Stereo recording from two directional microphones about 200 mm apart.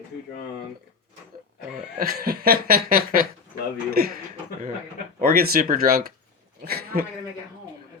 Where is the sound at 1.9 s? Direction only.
45° right (ahead or behind).